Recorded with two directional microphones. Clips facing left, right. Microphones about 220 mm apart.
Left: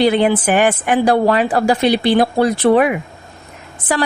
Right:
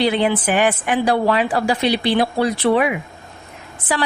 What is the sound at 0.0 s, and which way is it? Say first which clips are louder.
A woman's voice: left 4 dB; 45° left (ahead or behind).